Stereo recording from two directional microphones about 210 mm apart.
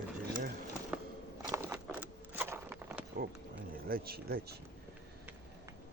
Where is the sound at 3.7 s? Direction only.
45° right (ahead or behind).